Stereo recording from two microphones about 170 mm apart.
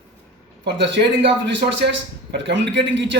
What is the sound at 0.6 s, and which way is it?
A man's voice, 85° right.